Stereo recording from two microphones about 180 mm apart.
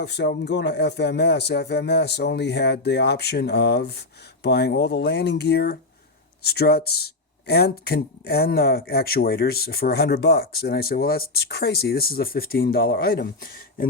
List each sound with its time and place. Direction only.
0.0 s speech: 70° left (ahead or behind)